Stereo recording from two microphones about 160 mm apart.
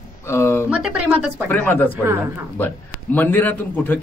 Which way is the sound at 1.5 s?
10° left (ahead or behind).